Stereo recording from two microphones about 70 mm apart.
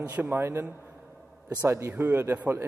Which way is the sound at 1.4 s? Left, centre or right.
Right.